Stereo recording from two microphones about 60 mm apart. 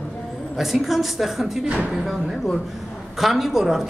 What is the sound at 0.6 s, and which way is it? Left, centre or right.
A man's voice, centre.